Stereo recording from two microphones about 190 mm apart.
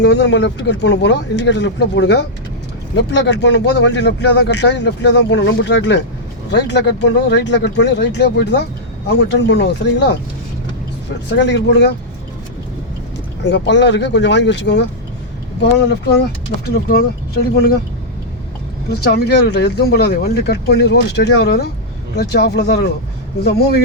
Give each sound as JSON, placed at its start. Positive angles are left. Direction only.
{"t": 0.0, "sound": "speech", "side_deg": 65}
{"t": 11.3, "sound": "speech", "side_deg": 65}
{"t": 13.4, "sound": "speech", "side_deg": 70}
{"t": 16.6, "sound": "speech", "side_deg": 55}
{"t": 19.0, "sound": "speech", "side_deg": 60}